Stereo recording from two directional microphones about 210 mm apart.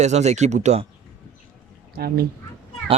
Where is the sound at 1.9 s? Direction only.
45° right (ahead or behind).